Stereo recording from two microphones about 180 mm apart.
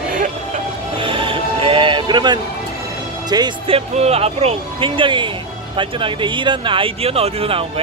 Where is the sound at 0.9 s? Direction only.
30° right (ahead or behind).